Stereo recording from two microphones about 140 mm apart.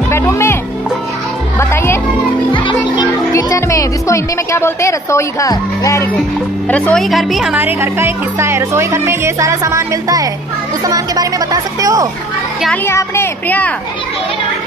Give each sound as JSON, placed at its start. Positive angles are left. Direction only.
{"t": 0.1, "sound": "music", "side_deg": 20}
{"t": 1.6, "sound": "music", "side_deg": 20}
{"t": 3.0, "sound": "music", "side_deg": 25}
{"t": 6.7, "sound": "a woman's voice", "side_deg": 5}
{"t": 7.5, "sound": "speech", "side_deg": -15}
{"t": 12.8, "sound": "speech", "side_deg": 20}